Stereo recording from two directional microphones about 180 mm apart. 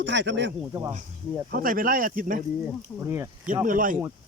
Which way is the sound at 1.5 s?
50° right (ahead or behind).